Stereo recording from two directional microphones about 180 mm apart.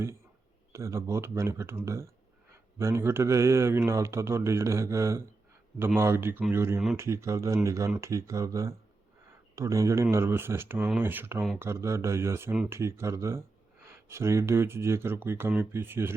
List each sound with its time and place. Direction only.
0.7 s a man's voice: 15° right (ahead or behind)